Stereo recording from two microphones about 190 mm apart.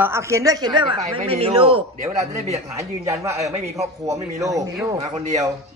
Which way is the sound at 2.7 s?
15° right (ahead or behind).